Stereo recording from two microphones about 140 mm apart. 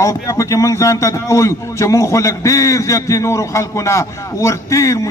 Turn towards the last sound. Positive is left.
turn(degrees=20)  # may be behind; listen again after turning